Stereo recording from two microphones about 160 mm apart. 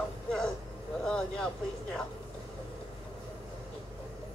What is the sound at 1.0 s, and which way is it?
Vehicle, 5° left (ahead or behind).